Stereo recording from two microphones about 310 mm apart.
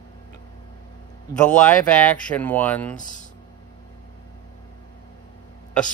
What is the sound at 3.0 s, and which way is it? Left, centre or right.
Speech, left.